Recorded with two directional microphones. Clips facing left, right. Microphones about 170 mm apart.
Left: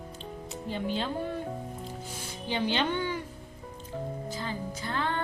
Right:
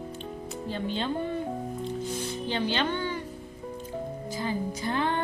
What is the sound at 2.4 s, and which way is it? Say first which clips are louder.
Speech: left 1 dB; 15° left (ahead or behind).